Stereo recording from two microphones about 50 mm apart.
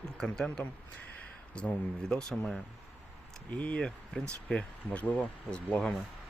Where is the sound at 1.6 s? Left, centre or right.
Left.